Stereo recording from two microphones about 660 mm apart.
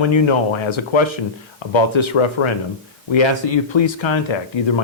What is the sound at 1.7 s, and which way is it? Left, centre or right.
Speech, left.